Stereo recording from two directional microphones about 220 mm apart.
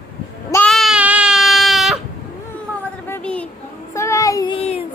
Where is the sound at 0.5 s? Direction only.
5° left (ahead or behind).